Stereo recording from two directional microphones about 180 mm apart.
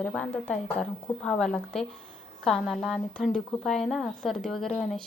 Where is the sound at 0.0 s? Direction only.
5° left (ahead or behind).